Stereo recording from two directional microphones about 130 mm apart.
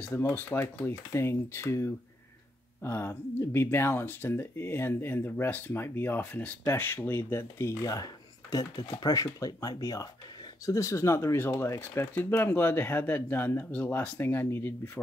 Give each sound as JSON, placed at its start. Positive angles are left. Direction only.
{"t": 0.0, "sound": "speech", "side_deg": 15}